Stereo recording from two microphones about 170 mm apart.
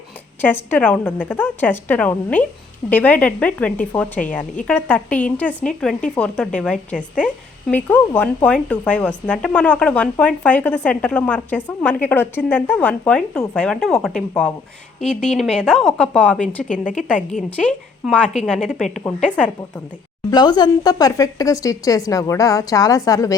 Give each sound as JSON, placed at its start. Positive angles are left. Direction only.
{"t": 0.4, "sound": "a woman's voice", "side_deg": 10}
{"t": 16.6, "sound": "a woman's voice", "side_deg": 50}
{"t": 17.6, "sound": "a woman's voice", "side_deg": 0}
{"t": 20.3, "sound": "a woman's voice", "side_deg": 25}